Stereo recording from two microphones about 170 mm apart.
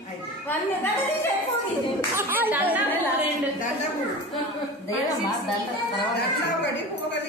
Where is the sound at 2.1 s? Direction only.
10° right (ahead or behind).